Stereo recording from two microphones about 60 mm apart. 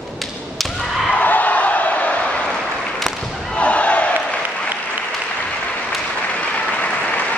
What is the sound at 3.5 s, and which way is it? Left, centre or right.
Battle cry, left.